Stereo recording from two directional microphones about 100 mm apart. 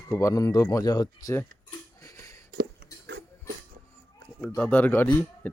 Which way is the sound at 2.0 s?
30° left (ahead or behind).